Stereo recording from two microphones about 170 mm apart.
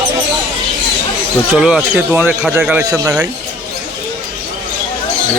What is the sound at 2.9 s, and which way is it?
Speech, 15° right (ahead or behind).